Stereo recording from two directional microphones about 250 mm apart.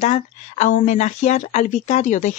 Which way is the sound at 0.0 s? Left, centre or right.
Left.